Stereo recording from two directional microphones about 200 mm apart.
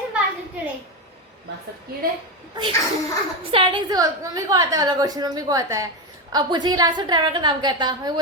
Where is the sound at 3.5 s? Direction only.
25° right (ahead or behind).